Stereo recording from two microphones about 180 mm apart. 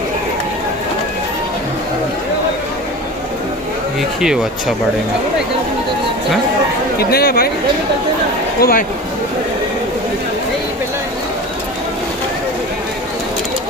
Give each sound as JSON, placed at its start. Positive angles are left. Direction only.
{"t": 4.2, "sound": "speech", "side_deg": -5}
{"t": 7.0, "sound": "speech", "side_deg": 60}
{"t": 8.5, "sound": "speech", "side_deg": 55}